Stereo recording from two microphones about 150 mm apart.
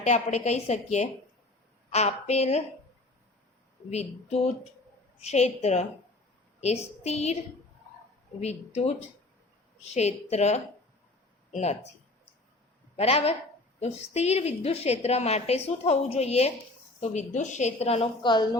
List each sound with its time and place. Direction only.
0.0 s a woman's voice: 50° left (ahead or behind)
3.8 s a woman's voice: 45° left (ahead or behind)
8.4 s a woman's voice: 45° left (ahead or behind)
13.0 s a woman's voice: 40° left (ahead or behind)